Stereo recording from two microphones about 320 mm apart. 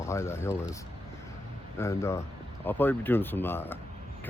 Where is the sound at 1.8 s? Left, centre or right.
Centre.